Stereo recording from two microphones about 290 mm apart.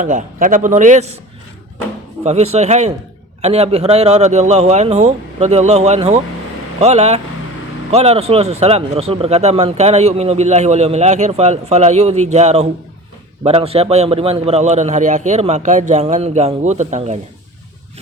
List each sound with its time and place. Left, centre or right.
0.0 s a man's voice: right
2.2 s a man's voice: right